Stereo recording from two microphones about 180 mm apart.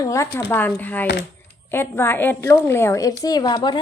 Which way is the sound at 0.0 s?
15° left (ahead or behind).